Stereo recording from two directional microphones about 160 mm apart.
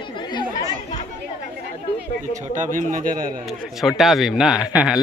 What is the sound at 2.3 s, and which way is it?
A man's voice, 50° right (ahead or behind).